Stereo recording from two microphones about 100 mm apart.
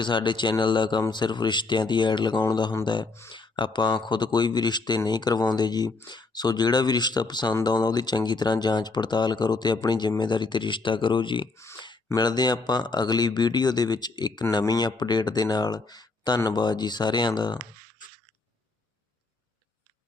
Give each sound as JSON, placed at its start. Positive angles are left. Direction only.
{"t": 0.0, "sound": "speech", "side_deg": 50}
{"t": 11.5, "sound": "speech", "side_deg": 30}
{"t": 12.1, "sound": "speech", "side_deg": 45}